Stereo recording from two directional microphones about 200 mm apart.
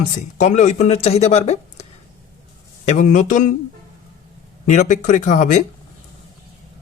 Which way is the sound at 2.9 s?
40° left (ahead or behind).